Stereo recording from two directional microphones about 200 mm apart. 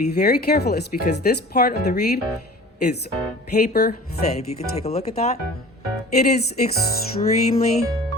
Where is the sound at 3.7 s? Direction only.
50° left (ahead or behind).